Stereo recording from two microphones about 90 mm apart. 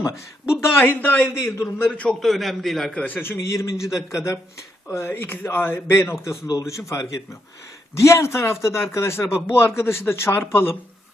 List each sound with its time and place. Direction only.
0.5 s speech: 25° left (ahead or behind)
1.9 s a man's voice: 10° left (ahead or behind)
2.2 s a man's voice: centre (ahead or behind)
3.0 s a man's voice: 20° left (ahead or behind)